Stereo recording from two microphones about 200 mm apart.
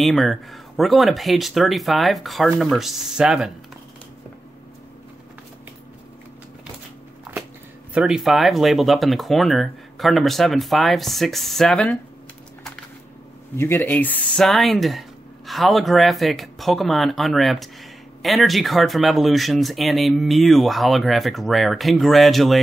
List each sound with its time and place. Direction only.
0.0 s speech: centre (ahead or behind)
7.9 s speech: 5° right (ahead or behind)
13.6 s speech: 10° left (ahead or behind)